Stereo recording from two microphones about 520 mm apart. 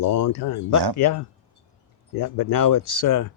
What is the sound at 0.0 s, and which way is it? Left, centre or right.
Speech, left.